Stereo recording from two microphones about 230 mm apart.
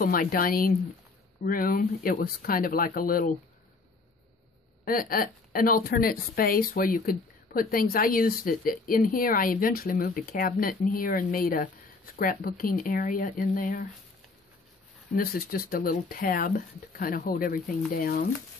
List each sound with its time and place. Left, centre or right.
0.0 s a woman's voice: left
4.8 s a woman's voice: left
15.1 s a woman's voice: left